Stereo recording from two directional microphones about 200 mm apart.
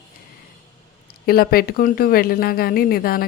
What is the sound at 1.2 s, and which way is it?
A woman's voice, 50° left (ahead or behind).